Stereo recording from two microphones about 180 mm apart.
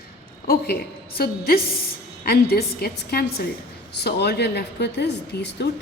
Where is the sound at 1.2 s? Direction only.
55° left (ahead or behind).